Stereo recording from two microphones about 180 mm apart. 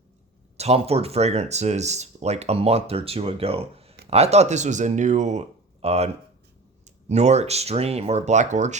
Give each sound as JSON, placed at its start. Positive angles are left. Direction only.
{"t": 0.5, "sound": "speech", "side_deg": -35}